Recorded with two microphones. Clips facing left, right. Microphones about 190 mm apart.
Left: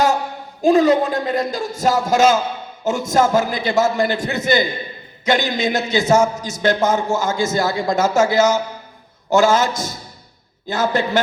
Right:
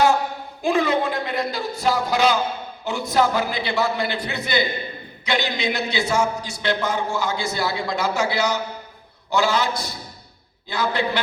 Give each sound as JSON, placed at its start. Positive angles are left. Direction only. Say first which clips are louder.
{"t": 0.6, "sound": "a man's voice", "louder": "left 7 dB", "side_deg": 40}